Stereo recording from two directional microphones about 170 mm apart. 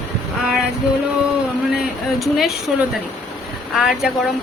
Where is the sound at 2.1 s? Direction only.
Centre (ahead or behind).